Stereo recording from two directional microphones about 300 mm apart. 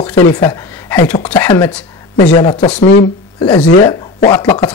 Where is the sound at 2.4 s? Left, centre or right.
Left.